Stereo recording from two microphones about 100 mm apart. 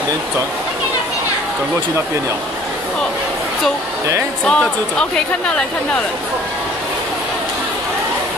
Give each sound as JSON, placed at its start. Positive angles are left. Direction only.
{"t": 4.5, "sound": "speech", "side_deg": 10}